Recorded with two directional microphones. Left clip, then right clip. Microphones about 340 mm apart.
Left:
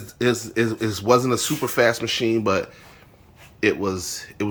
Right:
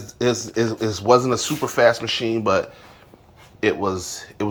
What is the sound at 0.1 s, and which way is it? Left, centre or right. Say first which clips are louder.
Speech: right 1 dB; centre.